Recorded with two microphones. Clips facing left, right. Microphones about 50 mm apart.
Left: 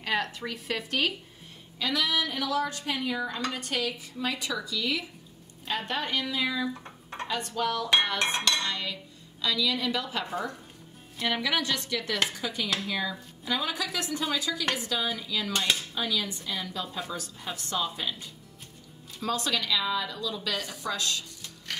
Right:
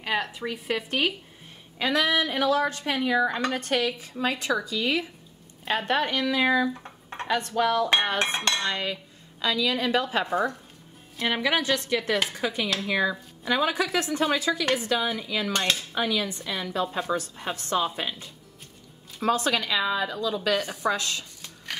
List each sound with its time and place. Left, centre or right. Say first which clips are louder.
0.0 s speech: right 2 dB; centre
1.8 s a woman's voice: right 5 dB; right
6.7 s dishes: right 2 dB; centre
7.2 s a woman's voice: right 6 dB; right
8.6 s a woman's voice: right 4 dB; right
11.2 s a woman's voice: right 4 dB; right
12.4 s a woman's voice: right 4 dB; right